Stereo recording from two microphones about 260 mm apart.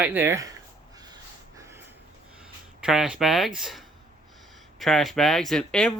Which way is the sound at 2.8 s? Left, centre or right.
Centre.